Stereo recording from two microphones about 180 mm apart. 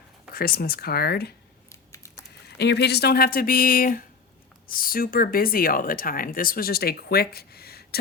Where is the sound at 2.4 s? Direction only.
70° left (ahead or behind).